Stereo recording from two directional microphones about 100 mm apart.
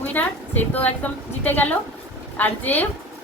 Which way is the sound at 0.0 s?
20° left (ahead or behind).